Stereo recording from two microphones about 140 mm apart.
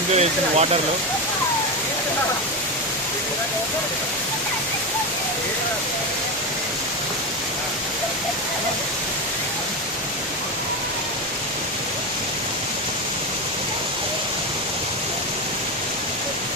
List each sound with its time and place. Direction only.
0.1 s speech: 50° right (ahead or behind)